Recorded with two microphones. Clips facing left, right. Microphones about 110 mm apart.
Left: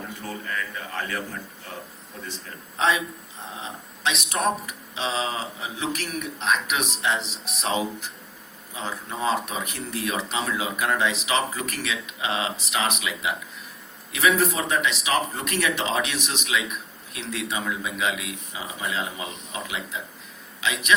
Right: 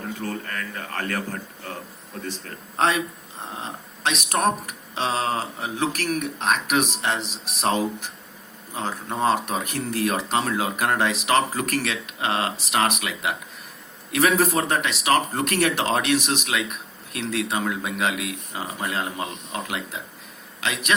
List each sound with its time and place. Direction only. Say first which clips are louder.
0.3 s speech: right 1 dB; 55° right (ahead or behind)
2.7 s speech: right 2 dB; 55° right (ahead or behind)
8.7 s a man's voice: right 4 dB; 55° right (ahead or behind)